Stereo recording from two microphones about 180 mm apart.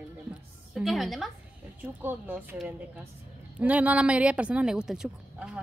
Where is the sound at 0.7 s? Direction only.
Centre (ahead or behind).